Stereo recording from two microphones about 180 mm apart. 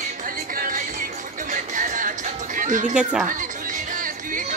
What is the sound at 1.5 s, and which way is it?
Music, 50° right (ahead or behind).